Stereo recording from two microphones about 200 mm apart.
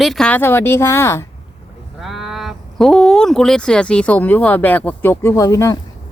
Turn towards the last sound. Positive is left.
turn(degrees=15)  # may be behind; listen again after turning